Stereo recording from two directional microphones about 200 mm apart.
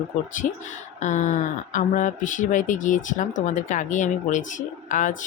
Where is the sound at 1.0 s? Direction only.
35° left (ahead or behind).